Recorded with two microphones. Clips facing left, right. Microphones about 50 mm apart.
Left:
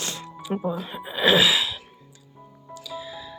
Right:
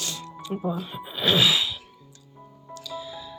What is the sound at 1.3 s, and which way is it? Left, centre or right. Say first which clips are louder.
Sneeze: even; centre.